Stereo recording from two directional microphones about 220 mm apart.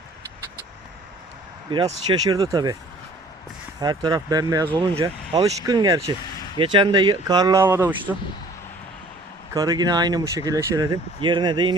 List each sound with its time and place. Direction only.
1.7 s speech: 20° right (ahead or behind)
3.8 s speech: 20° right (ahead or behind)
9.6 s speech: 15° right (ahead or behind)